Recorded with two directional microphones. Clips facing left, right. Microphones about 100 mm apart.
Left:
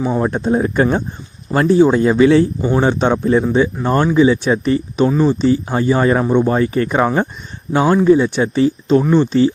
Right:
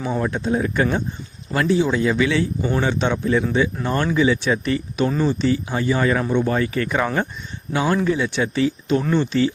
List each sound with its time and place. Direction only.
0.3 s speech: 45° left (ahead or behind)